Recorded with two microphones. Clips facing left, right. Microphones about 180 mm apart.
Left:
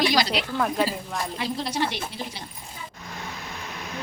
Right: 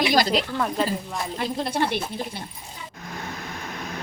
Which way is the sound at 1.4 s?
55° right (ahead or behind).